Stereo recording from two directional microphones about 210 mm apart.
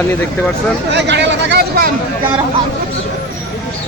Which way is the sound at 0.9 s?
55° right (ahead or behind).